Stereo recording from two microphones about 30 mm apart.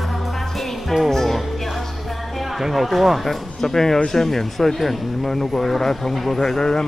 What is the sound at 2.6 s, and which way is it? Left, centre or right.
Speech, centre.